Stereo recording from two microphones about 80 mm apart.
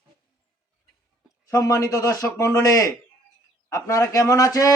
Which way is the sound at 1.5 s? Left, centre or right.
Left.